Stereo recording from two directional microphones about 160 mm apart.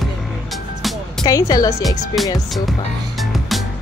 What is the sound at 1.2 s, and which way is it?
Speech, 20° left (ahead or behind).